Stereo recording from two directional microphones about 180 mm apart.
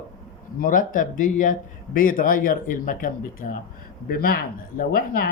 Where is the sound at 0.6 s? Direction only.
50° left (ahead or behind).